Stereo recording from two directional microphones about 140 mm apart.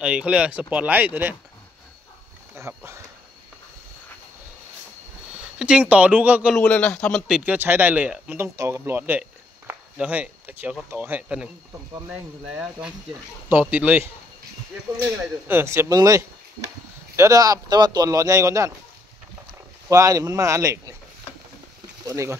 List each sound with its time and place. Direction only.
0.0 s speech: 5° right (ahead or behind)
2.5 s speech: 20° right (ahead or behind)
5.6 s speech: 10° right (ahead or behind)
6.5 s speech: 10° left (ahead or behind); by 14.1 s 10° right (ahead or behind)
15.4 s speech: 15° right (ahead or behind)
19.9 s speech: 25° right (ahead or behind)
22.0 s speech: 20° right (ahead or behind)